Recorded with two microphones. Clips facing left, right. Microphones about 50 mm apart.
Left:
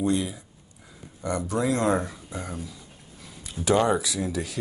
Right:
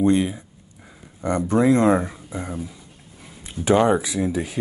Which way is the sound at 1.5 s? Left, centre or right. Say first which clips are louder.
Right 7 dB; right.